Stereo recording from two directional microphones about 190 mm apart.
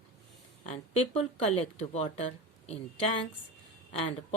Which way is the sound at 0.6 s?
35° left (ahead or behind).